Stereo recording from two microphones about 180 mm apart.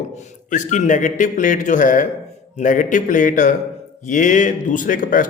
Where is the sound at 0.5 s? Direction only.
45° left (ahead or behind).